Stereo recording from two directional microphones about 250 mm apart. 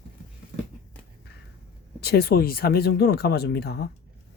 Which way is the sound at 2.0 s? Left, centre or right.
Left.